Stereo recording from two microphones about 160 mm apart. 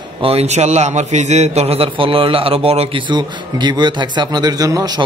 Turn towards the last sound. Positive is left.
turn(degrees=-25)  # may be behind; listen again after turning